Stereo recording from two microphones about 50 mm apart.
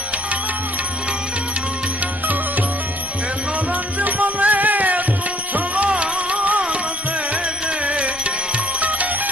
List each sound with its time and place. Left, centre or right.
2.2 s music: right
3.7 s music: right
7.9 s music: right